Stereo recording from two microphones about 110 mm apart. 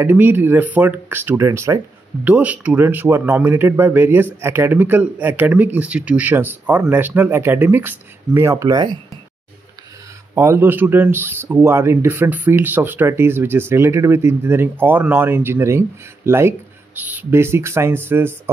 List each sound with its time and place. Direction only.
0.0 s speech: 20° right (ahead or behind)
2.2 s a man's voice: 15° right (ahead or behind)
8.3 s speech: 30° right (ahead or behind)
10.3 s speech: 20° right (ahead or behind)